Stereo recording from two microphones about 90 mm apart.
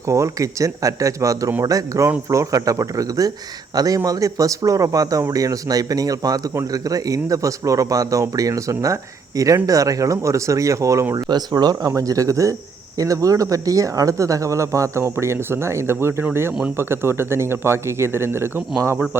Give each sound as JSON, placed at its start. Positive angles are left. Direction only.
{"t": 0.1, "sound": "speech", "side_deg": -35}